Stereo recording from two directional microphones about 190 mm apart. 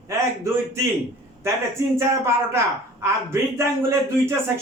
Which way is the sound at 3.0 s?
15° right (ahead or behind).